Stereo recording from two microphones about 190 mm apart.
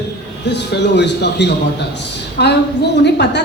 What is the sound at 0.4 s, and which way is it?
A woman's voice, 65° left (ahead or behind).